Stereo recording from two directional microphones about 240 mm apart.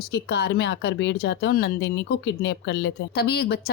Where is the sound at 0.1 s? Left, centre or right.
Left.